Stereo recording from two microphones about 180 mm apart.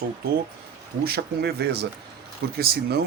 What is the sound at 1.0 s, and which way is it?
Speech, 60° right (ahead or behind).